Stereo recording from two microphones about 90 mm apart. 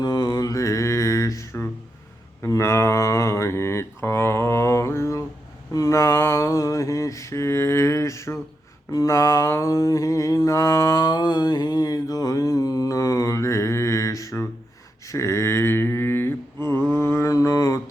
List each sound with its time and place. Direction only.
0.0 s mantra: 50° left (ahead or behind)